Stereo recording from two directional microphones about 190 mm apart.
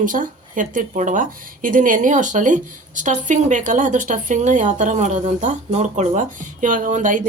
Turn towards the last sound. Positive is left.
turn(degrees=-45)  # may be behind; listen again after turning